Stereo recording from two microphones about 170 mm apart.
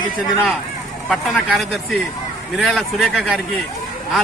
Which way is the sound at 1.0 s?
5° left (ahead or behind).